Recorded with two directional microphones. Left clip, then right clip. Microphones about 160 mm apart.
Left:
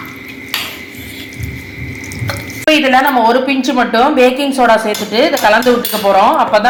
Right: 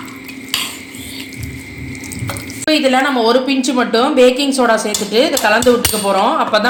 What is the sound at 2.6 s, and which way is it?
A woman's voice, 5° right (ahead or behind).